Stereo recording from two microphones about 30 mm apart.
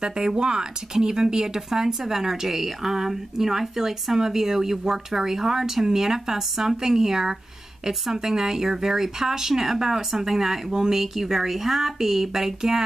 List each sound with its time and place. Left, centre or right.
0.0 s speech: right